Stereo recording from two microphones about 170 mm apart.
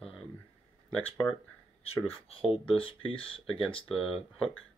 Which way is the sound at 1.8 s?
35° left (ahead or behind).